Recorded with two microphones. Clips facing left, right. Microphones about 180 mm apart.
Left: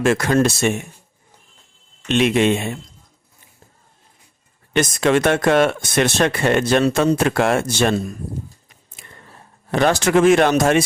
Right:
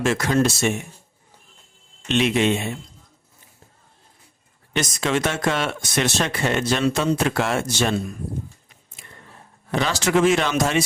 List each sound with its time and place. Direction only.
0.0 s speech: 55° left (ahead or behind)
2.0 s speech: 55° left (ahead or behind)
4.7 s speech: 55° left (ahead or behind)
9.7 s speech: 55° left (ahead or behind)